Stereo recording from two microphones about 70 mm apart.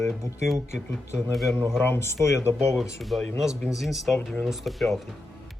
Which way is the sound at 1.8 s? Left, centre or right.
Left.